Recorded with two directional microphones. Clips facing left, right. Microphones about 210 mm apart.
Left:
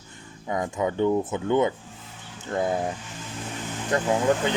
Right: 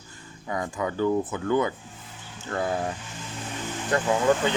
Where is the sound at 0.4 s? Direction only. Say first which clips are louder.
Left 3 dB; 20° left (ahead or behind).